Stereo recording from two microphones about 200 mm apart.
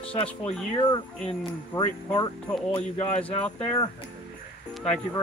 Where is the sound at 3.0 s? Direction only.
25° left (ahead or behind).